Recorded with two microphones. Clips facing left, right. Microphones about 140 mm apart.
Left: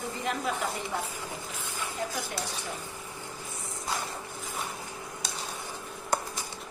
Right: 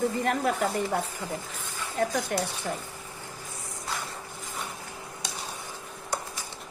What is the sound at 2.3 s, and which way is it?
Speech, 60° right (ahead or behind).